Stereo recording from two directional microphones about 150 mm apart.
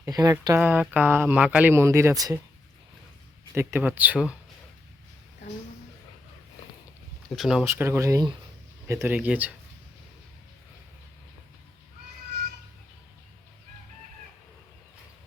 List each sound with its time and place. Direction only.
0.0 s speech: 25° right (ahead or behind)
0.6 s speech: 10° right (ahead or behind)
3.5 s speech: 15° right (ahead or behind)
7.3 s speech: centre (ahead or behind)
7.6 s speech: 15° right (ahead or behind)